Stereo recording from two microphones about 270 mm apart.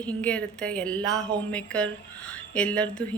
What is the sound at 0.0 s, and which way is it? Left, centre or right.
A woman's voice, centre.